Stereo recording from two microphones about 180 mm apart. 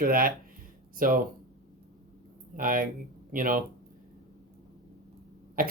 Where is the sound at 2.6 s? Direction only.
50° right (ahead or behind).